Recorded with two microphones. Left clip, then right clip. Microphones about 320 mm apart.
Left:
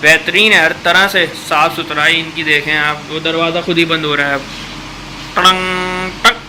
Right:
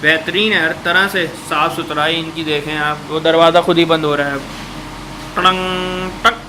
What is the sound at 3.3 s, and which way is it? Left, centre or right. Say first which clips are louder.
Speech: right 6 dB; right.